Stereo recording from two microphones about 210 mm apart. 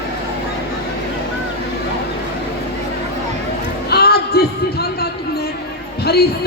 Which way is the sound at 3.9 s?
50° left (ahead or behind).